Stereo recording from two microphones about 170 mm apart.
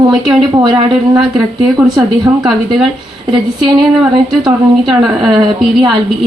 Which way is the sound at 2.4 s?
Centre (ahead or behind).